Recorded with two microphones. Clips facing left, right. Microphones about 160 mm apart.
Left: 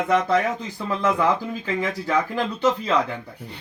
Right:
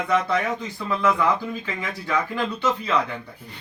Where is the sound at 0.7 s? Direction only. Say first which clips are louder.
Right 1 dB; 40° left (ahead or behind).